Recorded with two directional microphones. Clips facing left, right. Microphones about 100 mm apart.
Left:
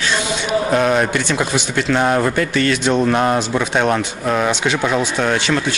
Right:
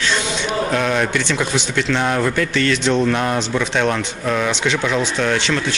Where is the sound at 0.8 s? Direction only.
40° left (ahead or behind).